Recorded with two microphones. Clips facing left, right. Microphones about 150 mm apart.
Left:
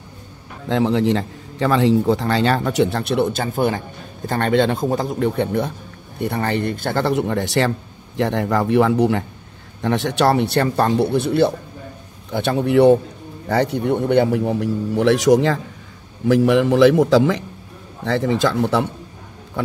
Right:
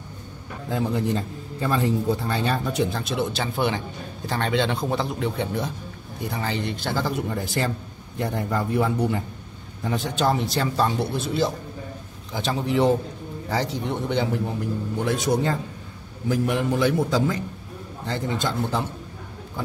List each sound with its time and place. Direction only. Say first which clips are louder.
0.7 s a man's voice: left 7 dB; 90° left